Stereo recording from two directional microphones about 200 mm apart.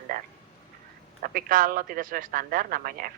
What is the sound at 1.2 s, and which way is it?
Speech, 45° right (ahead or behind).